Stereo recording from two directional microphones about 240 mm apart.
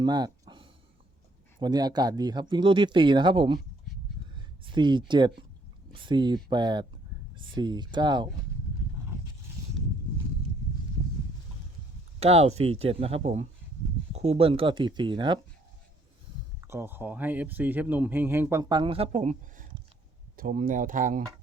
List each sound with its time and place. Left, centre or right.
0.0 s a sound: centre
1.6 s speech: centre
12.2 s speech: right
16.6 s speech: centre; by 21.2 s right